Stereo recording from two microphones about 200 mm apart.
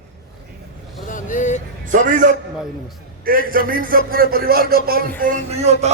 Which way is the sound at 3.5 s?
45° right (ahead or behind).